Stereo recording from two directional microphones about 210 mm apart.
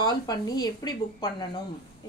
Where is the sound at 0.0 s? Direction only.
20° left (ahead or behind).